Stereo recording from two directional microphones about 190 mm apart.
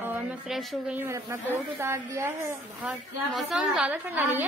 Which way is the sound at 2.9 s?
Centre (ahead or behind).